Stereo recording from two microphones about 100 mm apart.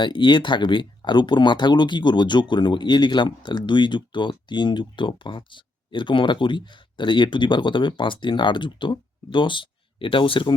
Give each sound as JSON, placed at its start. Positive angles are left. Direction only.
{"t": 0.0, "sound": "speech", "side_deg": 50}